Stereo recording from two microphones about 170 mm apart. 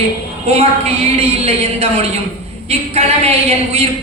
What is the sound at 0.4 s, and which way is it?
A woman's voice, 35° right (ahead or behind).